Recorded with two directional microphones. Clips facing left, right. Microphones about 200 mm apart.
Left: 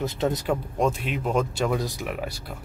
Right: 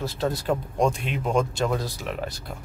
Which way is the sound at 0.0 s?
20° left (ahead or behind).